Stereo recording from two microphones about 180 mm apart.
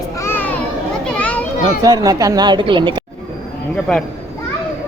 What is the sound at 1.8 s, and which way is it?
Speech, 20° right (ahead or behind).